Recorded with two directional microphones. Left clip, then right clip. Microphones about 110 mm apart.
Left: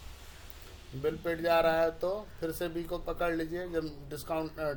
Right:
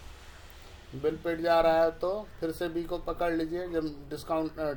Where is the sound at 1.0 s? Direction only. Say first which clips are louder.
Right 2 dB; 20° right (ahead or behind).